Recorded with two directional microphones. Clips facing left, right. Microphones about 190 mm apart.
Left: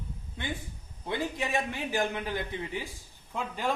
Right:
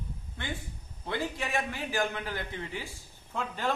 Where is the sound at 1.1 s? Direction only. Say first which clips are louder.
Left 1 dB; 20° left (ahead or behind).